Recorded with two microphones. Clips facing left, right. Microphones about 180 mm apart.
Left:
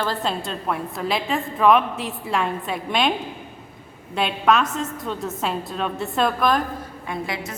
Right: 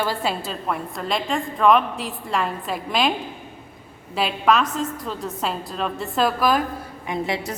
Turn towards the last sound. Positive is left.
turn(degrees=-20)  # may be behind; listen again after turning